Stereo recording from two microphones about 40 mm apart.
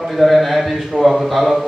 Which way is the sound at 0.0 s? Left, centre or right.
Centre.